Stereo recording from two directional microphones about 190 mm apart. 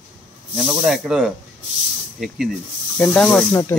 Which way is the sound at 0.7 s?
5° right (ahead or behind).